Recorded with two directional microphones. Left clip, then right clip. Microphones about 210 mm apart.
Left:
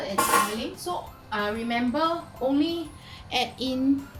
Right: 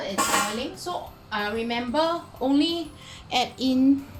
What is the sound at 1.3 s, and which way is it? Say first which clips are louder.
Music: even; 45° right (ahead or behind).